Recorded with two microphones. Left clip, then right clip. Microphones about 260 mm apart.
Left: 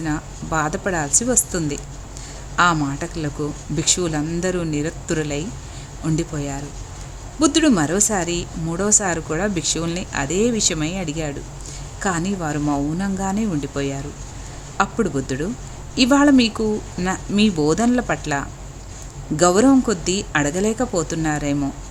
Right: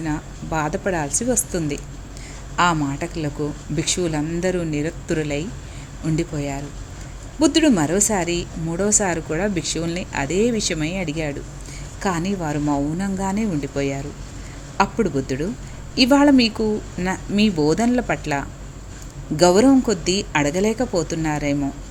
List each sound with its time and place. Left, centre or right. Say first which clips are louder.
0.0 s speech: left 1 dB; centre